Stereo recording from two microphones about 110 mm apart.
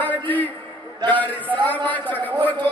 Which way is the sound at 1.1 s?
15° left (ahead or behind).